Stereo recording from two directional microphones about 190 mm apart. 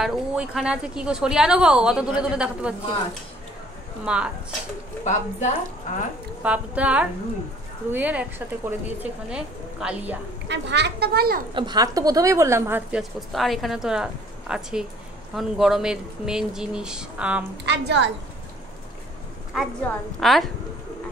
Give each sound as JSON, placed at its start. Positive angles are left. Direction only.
{"t": 0.0, "sound": "a woman's voice", "side_deg": 0}
{"t": 4.0, "sound": "a woman's voice", "side_deg": -5}
{"t": 5.0, "sound": "a woman's voice", "side_deg": 40}
{"t": 6.4, "sound": "speech", "side_deg": -5}
{"t": 10.5, "sound": "speech", "side_deg": -65}
{"t": 11.5, "sound": "speech", "side_deg": -20}
{"t": 13.3, "sound": "a woman's voice", "side_deg": 0}
{"t": 17.6, "sound": "a woman's voice", "side_deg": -65}
{"t": 19.5, "sound": "a woman's voice", "side_deg": 0}